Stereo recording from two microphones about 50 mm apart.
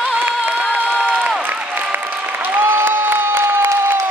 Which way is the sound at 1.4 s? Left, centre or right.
Right.